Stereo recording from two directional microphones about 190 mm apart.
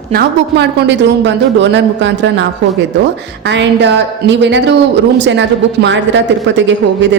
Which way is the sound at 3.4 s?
70° right (ahead or behind).